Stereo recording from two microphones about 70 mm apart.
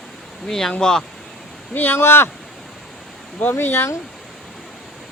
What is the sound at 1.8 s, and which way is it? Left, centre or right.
Speech, left.